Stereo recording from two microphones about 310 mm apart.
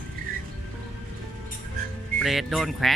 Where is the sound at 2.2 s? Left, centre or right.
Centre.